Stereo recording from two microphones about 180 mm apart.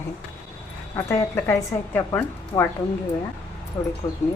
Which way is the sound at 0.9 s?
15° left (ahead or behind).